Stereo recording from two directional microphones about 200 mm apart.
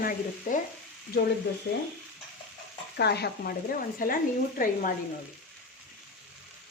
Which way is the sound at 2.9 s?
55° left (ahead or behind).